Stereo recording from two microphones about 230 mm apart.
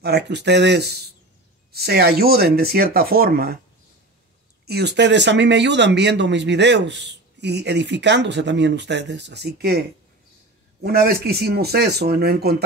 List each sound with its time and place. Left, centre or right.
0.0 s speech: right
4.6 s speech: right